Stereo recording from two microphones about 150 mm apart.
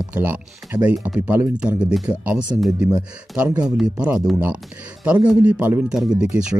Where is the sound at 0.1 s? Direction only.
15° right (ahead or behind).